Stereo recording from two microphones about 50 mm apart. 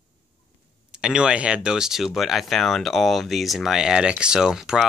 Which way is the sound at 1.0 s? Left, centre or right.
Centre.